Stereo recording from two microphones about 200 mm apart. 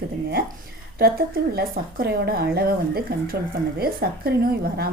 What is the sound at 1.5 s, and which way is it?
A woman's voice, 50° right (ahead or behind).